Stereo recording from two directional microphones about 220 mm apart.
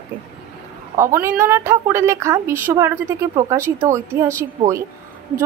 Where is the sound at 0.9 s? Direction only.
10° right (ahead or behind).